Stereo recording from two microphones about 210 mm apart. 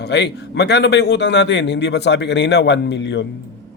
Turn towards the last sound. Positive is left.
turn(degrees=55)  # may be behind; listen again after turning